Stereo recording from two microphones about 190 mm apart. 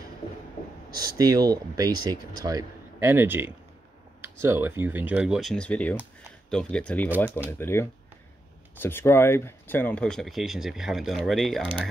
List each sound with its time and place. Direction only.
1.1 s speech: 20° right (ahead or behind); by 11.9 s 5° left (ahead or behind)